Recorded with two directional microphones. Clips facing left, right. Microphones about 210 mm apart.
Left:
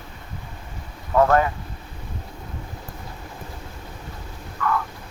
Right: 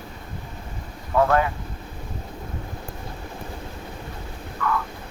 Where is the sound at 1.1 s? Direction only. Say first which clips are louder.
Left 2 dB; 45° left (ahead or behind).